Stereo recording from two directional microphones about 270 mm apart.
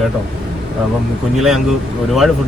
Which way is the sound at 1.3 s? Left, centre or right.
Centre.